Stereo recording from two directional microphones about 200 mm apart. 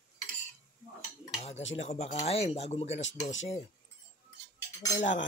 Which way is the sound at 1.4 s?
30° left (ahead or behind).